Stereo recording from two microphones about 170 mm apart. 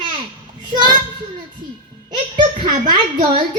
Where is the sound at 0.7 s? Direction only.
25° right (ahead or behind).